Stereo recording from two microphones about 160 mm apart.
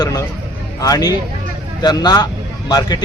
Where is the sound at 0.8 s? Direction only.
25° left (ahead or behind).